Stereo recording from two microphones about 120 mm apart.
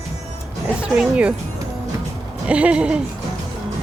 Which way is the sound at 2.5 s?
10° right (ahead or behind).